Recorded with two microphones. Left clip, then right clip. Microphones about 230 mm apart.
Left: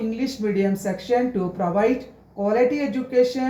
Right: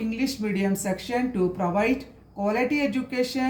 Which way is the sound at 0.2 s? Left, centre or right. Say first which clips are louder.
Left 4 dB; right.